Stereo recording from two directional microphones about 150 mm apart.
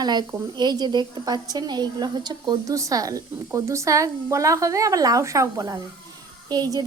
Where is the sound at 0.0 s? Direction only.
30° right (ahead or behind).